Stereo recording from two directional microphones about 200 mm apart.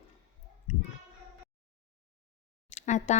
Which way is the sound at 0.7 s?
35° left (ahead or behind).